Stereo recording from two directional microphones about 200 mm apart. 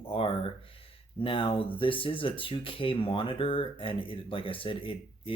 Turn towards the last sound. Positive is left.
turn(degrees=25)  # may be behind; listen again after turning